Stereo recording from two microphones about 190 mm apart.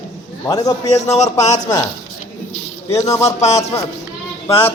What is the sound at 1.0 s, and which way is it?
Speech, 35° left (ahead or behind).